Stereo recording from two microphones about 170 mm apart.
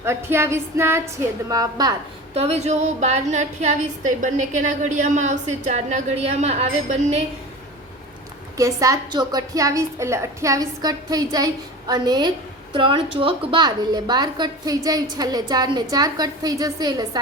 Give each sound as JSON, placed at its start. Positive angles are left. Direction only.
{"t": 0.0, "sound": "music", "side_deg": -15}
{"t": 1.5, "sound": "a woman's voice", "side_deg": -20}
{"t": 2.3, "sound": "a woman's voice", "side_deg": -35}
{"t": 8.5, "sound": "a woman's voice", "side_deg": -20}